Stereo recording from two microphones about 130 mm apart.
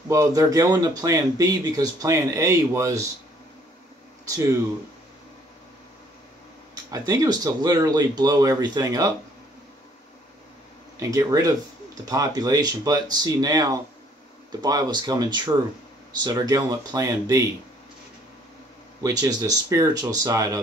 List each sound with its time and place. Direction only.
0.1 s speech: 25° right (ahead or behind)
6.7 s speech: 30° right (ahead or behind)
11.0 s speech: 25° right (ahead or behind)
19.0 s speech: 25° right (ahead or behind)